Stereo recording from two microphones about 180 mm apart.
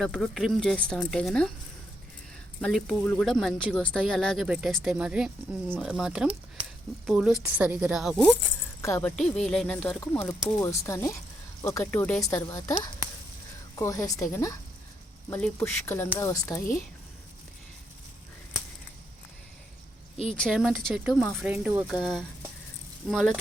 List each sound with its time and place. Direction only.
0.0 s speech: centre (ahead or behind)
2.6 s speech: 5° left (ahead or behind)
6.6 s a sound: 30° right (ahead or behind)
7.0 s speech: 5° right (ahead or behind)
8.8 s a woman's voice: 15° left (ahead or behind)
9.1 s a woman's voice: 5° left (ahead or behind)
15.3 s a woman's voice: 5° left (ahead or behind)
20.3 s speech: 5° left (ahead or behind)